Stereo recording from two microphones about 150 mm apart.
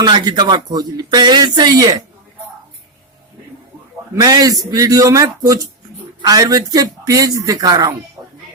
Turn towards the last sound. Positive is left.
turn(degrees=-25)  # may be behind; listen again after turning